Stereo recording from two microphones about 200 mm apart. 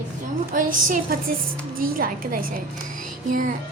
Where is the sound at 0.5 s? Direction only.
40° right (ahead or behind).